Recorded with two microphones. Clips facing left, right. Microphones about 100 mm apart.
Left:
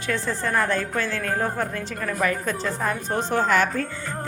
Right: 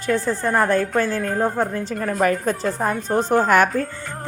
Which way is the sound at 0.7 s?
45° right (ahead or behind).